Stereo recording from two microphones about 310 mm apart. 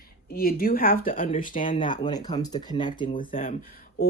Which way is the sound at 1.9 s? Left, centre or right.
Centre.